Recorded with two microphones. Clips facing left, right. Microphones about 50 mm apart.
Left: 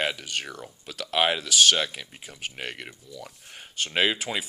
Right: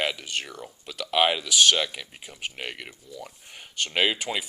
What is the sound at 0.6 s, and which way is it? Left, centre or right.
Speech, centre.